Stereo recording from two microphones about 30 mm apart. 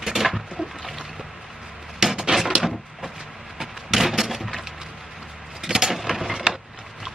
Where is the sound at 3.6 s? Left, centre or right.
Centre.